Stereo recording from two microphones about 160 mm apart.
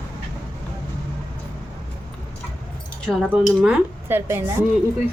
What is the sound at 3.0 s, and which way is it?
A woman's voice, 5° left (ahead or behind).